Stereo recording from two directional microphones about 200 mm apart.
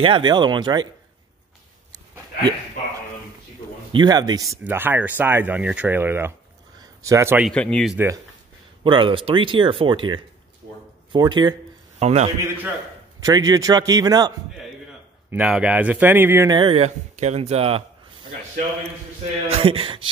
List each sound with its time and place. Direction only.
0.0 s speech: 25° right (ahead or behind)
3.9 s speech: 20° right (ahead or behind)
6.8 s a sound: 15° right (ahead or behind)
7.4 s speech: 5° left (ahead or behind)
8.8 s speech: 25° right (ahead or behind)
12.0 s a man's voice: 35° right (ahead or behind)
13.2 s speech: 20° right (ahead or behind)
15.3 s speech: 5° right (ahead or behind); by 17.8 s 30° right (ahead or behind)
19.4 s speech: 30° right (ahead or behind)